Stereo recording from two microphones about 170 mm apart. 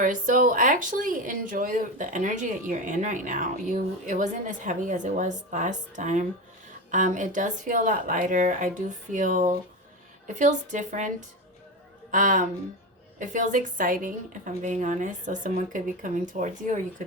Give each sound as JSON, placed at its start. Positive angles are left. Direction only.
{"t": 0.0, "sound": "speech", "side_deg": -50}
{"t": 12.1, "sound": "speech", "side_deg": -50}